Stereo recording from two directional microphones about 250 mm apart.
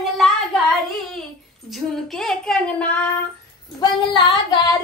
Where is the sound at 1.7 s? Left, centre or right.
Centre.